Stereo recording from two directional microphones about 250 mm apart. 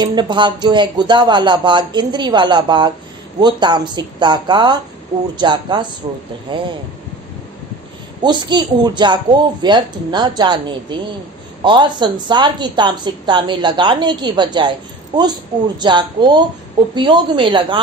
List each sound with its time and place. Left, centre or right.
0.0 s a woman's voice: centre
8.2 s a woman's voice: centre